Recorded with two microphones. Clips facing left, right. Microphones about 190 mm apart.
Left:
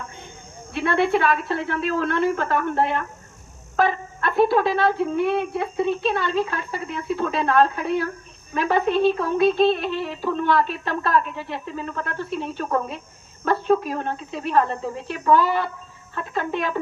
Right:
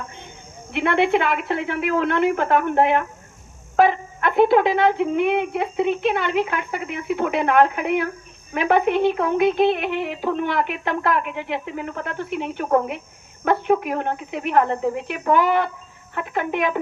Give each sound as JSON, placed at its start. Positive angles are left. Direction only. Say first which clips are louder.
{"t": 0.7, "sound": "speech", "louder": "right 2 dB", "side_deg": -20}